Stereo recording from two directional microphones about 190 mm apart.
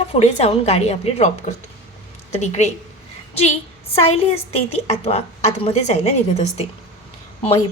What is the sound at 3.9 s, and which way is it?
A woman's voice, 30° left (ahead or behind).